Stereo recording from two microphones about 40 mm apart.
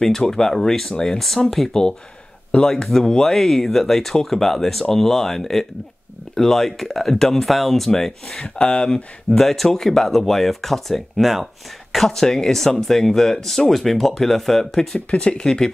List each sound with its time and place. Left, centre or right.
0.0 s speech: centre
8.4 s speech: left
9.4 s speech: centre
12.1 s speech: centre
15.0 s speech: left